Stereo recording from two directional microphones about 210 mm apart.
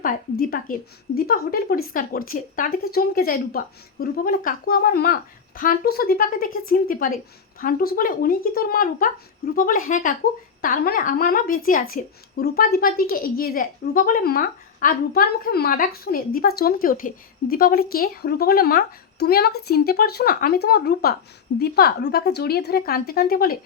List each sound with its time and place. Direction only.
0.0 s a woman's voice: 45° left (ahead or behind)